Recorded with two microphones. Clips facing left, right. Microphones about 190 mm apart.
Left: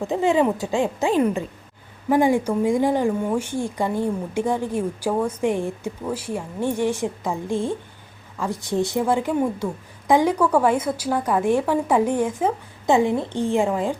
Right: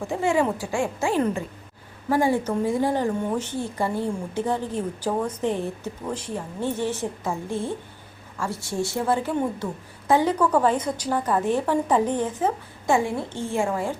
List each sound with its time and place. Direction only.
0.0 s a woman's voice: 20° left (ahead or behind)